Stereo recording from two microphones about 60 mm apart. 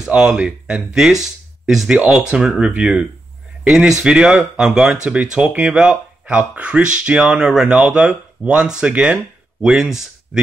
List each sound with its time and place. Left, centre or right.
0.1 s speech: centre
1.2 s a sound: centre
2.0 s speech: centre